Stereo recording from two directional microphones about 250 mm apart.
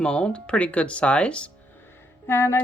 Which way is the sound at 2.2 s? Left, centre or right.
Centre.